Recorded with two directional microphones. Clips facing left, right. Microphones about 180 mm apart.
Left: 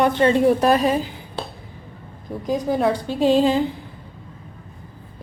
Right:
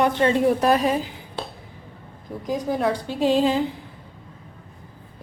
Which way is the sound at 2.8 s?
30° left (ahead or behind).